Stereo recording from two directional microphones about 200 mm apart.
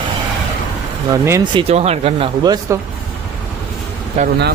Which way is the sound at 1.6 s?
30° right (ahead or behind).